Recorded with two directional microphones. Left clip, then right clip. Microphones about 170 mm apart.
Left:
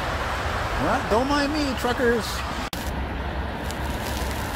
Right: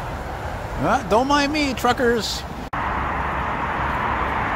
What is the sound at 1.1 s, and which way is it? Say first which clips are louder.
Speech: right 5 dB; 25° right (ahead or behind).